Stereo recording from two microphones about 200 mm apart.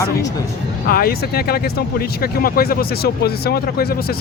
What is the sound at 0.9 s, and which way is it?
Speech, 50° left (ahead or behind).